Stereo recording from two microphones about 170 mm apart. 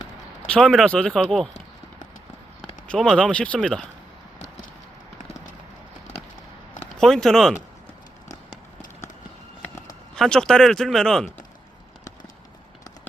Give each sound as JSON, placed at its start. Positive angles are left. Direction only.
{"t": 0.4, "sound": "speech", "side_deg": 5}
{"t": 2.8, "sound": "speech", "side_deg": 5}
{"t": 7.0, "sound": "speech", "side_deg": 0}
{"t": 10.2, "sound": "speech", "side_deg": 5}